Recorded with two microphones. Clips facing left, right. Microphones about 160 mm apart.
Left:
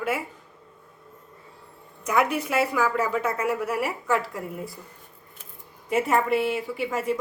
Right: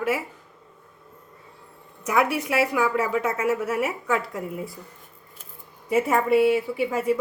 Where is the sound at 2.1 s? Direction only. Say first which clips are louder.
Right 1 dB; 10° right (ahead or behind).